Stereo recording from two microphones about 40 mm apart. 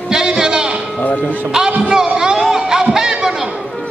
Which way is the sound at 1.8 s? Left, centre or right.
Right.